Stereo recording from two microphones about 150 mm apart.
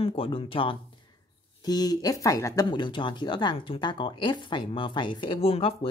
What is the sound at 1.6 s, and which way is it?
Speech, 25° left (ahead or behind).